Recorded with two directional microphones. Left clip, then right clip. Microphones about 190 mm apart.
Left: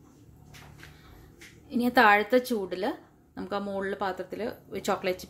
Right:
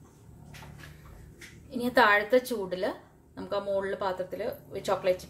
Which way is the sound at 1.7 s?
30° left (ahead or behind).